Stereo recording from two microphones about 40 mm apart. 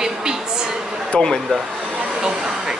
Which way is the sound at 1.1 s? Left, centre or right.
Left.